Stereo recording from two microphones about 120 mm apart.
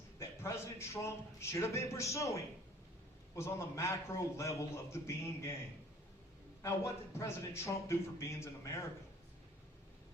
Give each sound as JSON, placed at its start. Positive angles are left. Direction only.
{"t": 0.2, "sound": "a man's voice", "side_deg": 25}
{"t": 6.6, "sound": "a man's voice", "side_deg": 20}